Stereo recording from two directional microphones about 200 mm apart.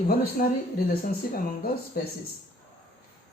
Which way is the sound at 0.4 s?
45° left (ahead or behind).